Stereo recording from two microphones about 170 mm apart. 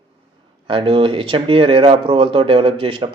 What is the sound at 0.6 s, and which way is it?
Speech, 30° right (ahead or behind).